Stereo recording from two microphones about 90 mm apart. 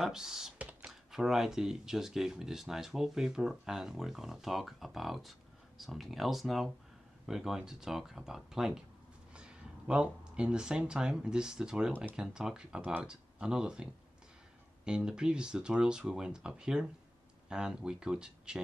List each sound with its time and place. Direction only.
0.0 s speech: 5° right (ahead or behind)
0.6 s computer keyboard: 15° right (ahead or behind)
1.1 s speech: 5° right (ahead or behind)
14.9 s speech: 10° right (ahead or behind)